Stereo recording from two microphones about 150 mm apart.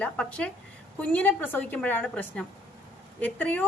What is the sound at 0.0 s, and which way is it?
A woman's voice, 10° left (ahead or behind).